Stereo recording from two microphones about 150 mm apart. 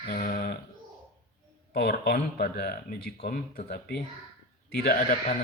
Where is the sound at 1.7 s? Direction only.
90° left.